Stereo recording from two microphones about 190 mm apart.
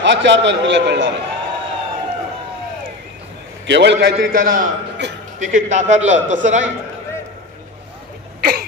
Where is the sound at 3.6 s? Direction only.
65° right (ahead or behind).